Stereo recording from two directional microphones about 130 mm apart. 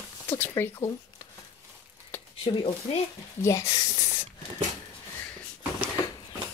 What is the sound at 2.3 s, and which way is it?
Speech, 45° left (ahead or behind).